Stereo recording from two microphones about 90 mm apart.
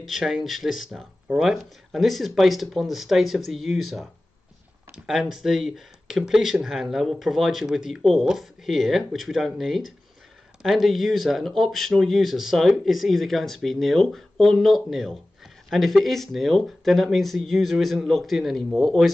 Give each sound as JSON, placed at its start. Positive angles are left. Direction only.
{"t": 0.0, "sound": "speech", "side_deg": -5}